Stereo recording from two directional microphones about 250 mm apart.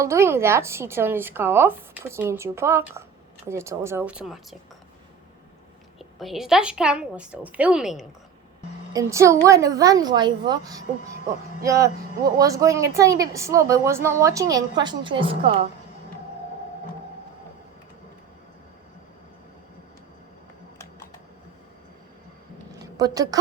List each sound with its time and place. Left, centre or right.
0.0 s speech: centre
6.0 s a woman's voice: centre
8.9 s speech: centre
22.8 s a woman's voice: centre